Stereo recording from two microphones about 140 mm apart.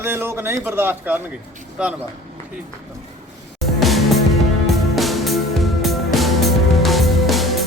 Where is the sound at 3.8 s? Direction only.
Centre (ahead or behind).